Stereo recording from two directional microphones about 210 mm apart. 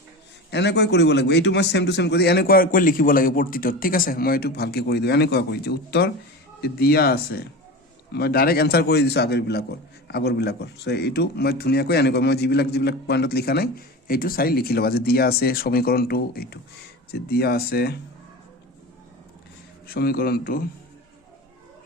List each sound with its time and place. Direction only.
0.5 s speech: 55° left (ahead or behind)
19.9 s speech: 45° left (ahead or behind)